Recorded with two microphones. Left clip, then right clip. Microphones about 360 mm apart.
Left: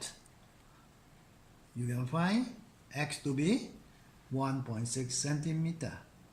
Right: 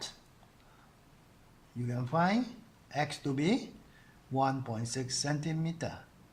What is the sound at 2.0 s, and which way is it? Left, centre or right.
Speech, centre.